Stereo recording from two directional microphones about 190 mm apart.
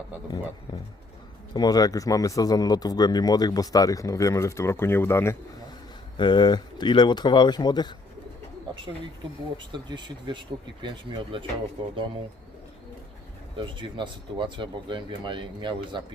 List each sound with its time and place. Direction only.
1.5 s speech: 20° left (ahead or behind)
6.1 s speech: 25° left (ahead or behind)
9.7 s speech: 25° right (ahead or behind)
13.6 s speech: 25° right (ahead or behind)